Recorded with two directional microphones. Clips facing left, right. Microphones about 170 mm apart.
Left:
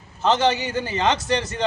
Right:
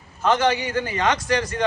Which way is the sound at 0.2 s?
25° left (ahead or behind).